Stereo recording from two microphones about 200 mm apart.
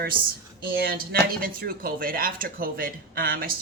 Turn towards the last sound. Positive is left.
turn(degrees=-45)  # may be behind; listen again after turning